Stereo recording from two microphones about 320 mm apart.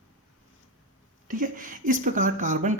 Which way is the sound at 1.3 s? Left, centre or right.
Right.